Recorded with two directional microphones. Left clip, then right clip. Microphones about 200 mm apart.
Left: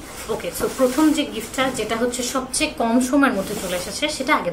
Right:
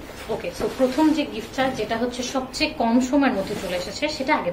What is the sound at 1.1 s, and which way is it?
Speech, 15° left (ahead or behind).